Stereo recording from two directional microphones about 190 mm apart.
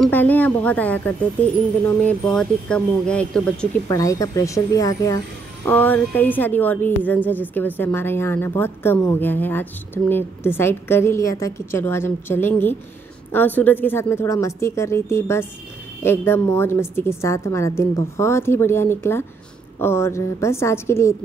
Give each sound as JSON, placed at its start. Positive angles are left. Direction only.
{"t": 0.0, "sound": "a woman's voice", "side_deg": 10}
{"t": 3.9, "sound": "a woman's voice", "side_deg": 15}